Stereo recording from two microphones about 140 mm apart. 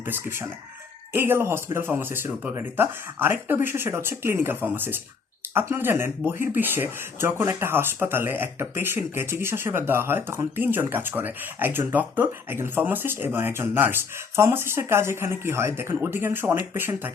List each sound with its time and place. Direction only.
0.0 s speech: 15° right (ahead or behind)